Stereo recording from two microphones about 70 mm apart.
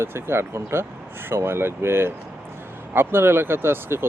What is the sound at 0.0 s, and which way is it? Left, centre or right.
Speech, right.